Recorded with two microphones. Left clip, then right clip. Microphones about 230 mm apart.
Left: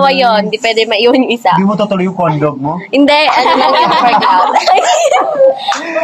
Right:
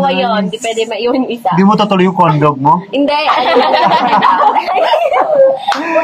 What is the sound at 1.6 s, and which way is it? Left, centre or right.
Speech, centre.